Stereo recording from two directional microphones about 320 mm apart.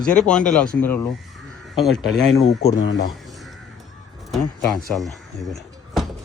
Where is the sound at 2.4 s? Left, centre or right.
Centre.